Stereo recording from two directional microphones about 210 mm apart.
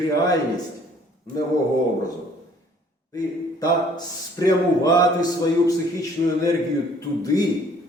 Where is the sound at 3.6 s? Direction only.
20° left (ahead or behind).